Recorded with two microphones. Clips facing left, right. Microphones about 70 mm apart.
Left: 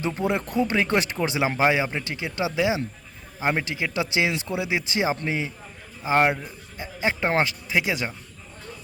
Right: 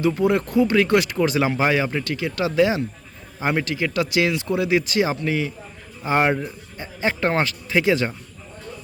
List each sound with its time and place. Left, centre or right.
0.0 s speech: left
6.4 s speech: centre